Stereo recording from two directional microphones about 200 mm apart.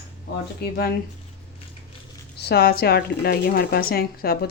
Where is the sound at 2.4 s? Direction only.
55° left (ahead or behind).